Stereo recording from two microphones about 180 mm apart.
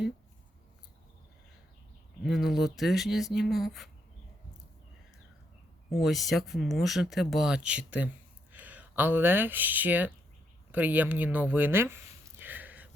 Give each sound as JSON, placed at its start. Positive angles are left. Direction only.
{"t": 2.2, "sound": "speech", "side_deg": 0}
{"t": 5.9, "sound": "speech", "side_deg": 0}
{"t": 10.7, "sound": "a sound", "side_deg": -10}